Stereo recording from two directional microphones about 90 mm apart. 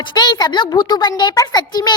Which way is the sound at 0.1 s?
50° left (ahead or behind).